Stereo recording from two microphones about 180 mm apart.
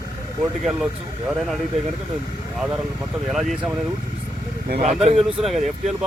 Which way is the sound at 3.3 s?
Centre (ahead or behind).